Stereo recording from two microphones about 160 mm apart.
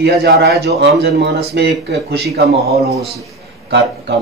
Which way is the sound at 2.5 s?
40° right (ahead or behind).